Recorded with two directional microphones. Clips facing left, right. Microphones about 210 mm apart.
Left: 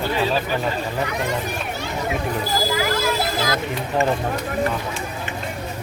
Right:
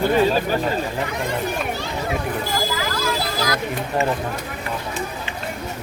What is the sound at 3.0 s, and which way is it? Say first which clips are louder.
Children playing: left 1 dB; 25° left (ahead or behind).